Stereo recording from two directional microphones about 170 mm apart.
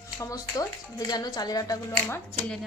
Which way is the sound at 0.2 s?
20° left (ahead or behind).